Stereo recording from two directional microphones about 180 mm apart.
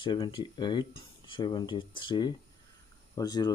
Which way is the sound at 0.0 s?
25° left (ahead or behind).